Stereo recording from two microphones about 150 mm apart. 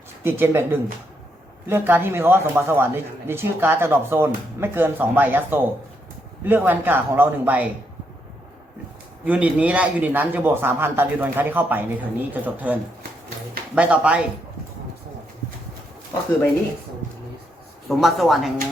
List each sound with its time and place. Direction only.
0.2 s speech: 15° right (ahead or behind)
9.2 s speech: 10° right (ahead or behind)
17.8 s speech: centre (ahead or behind)